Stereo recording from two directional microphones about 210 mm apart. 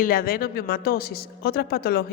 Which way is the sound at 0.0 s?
45° left (ahead or behind).